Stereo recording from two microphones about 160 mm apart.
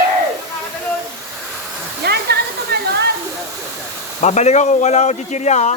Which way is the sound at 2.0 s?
85° right.